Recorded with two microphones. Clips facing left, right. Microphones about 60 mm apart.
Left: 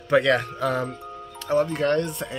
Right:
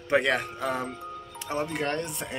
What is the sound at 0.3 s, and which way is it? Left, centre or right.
Speech, centre.